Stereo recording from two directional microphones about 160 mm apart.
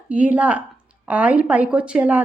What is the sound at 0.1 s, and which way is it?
A woman's voice, 10° right (ahead or behind).